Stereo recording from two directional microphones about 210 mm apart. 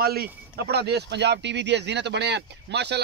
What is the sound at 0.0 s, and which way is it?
Speech, 45° right (ahead or behind).